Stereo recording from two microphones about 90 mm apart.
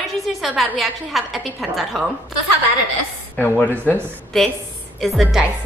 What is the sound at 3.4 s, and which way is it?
Speech, 20° left (ahead or behind).